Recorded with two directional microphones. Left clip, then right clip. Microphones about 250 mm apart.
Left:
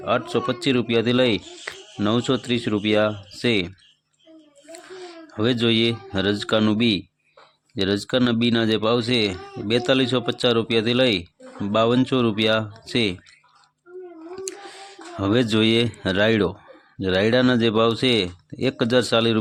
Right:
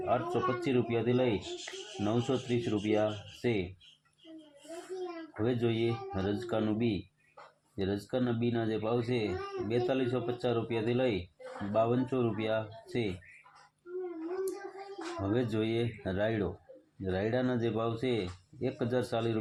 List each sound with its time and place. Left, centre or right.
0.0 s speech: left
5.4 s speech: left
15.2 s speech: left